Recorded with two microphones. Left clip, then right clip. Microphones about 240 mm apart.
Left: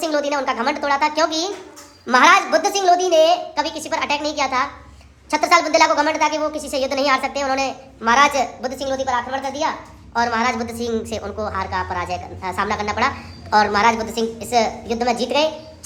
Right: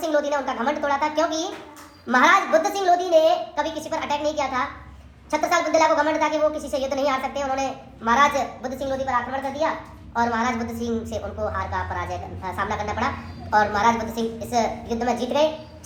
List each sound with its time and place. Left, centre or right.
0.0 s a woman's voice: left